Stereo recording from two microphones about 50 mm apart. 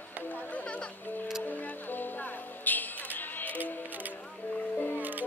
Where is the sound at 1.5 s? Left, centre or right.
Left.